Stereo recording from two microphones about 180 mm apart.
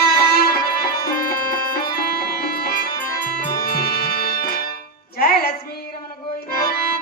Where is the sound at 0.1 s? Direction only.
60° left (ahead or behind).